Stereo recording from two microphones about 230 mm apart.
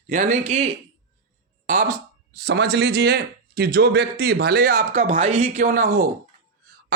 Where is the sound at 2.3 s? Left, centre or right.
Right.